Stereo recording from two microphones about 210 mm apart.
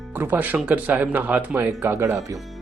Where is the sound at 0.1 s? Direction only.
10° right (ahead or behind).